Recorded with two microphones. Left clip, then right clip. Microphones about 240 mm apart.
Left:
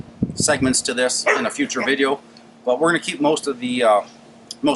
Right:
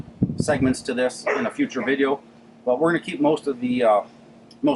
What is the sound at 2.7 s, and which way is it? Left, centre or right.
Speech, right.